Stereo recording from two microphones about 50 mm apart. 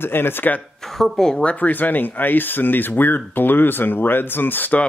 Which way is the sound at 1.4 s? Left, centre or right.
Left.